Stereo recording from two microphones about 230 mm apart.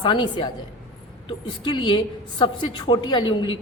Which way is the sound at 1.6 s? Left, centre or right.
Centre.